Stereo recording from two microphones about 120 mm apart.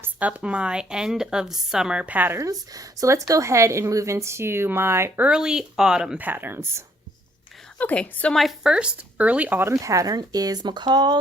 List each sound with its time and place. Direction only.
0.0 s a woman's voice: 10° right (ahead or behind)
7.8 s a woman's voice: 15° left (ahead or behind); by 11.2 s 35° right (ahead or behind)